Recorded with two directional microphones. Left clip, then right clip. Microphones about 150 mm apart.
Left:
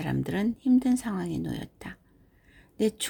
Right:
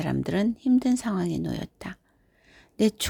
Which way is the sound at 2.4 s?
30° right (ahead or behind).